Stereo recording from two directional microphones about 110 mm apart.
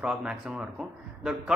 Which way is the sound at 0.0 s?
5° right (ahead or behind).